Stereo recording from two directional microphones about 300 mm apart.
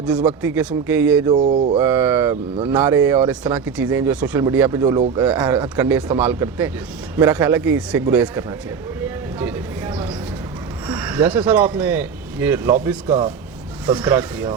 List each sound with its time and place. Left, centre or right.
0.0 s speech: centre
1.3 s mantra: right
1.8 s speech: centre
9.4 s a sound: centre
10.8 s speech: centre
13.1 s speech: centre
13.8 s speech: centre